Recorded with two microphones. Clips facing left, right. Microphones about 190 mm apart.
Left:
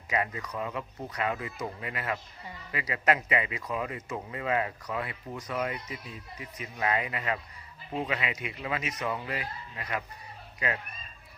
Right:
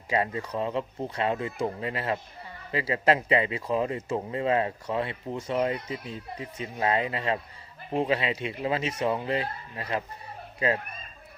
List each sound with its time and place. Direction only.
0.1 s speech: 30° right (ahead or behind)